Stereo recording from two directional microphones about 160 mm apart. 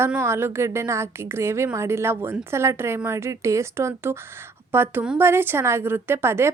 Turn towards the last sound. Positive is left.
turn(degrees=-15)  # may be behind; listen again after turning